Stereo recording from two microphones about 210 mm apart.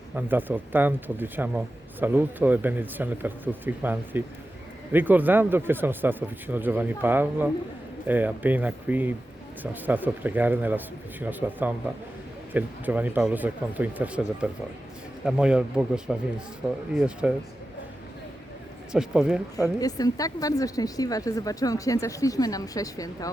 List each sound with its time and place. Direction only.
0.2 s speech: 10° right (ahead or behind)
18.9 s speech: 5° right (ahead or behind)
19.8 s speech: 15° left (ahead or behind)